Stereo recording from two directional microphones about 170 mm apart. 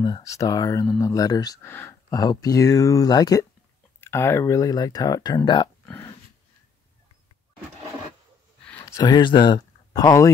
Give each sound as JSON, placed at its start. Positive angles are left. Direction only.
{"t": 0.0, "sound": "speech", "side_deg": 20}
{"t": 5.9, "sound": "a sound", "side_deg": 15}
{"t": 8.6, "sound": "speech", "side_deg": 15}